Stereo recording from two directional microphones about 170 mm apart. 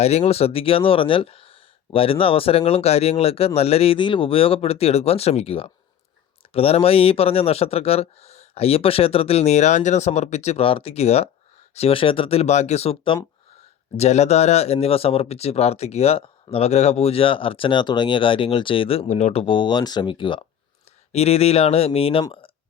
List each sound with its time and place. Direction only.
0.0 s speech: 40° left (ahead or behind)